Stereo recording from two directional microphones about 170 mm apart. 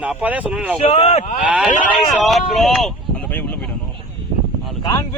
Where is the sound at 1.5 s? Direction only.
5° right (ahead or behind); by 3.7 s 10° left (ahead or behind).